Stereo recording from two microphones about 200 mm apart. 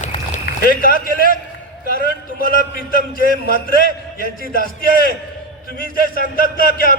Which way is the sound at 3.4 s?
45° left (ahead or behind).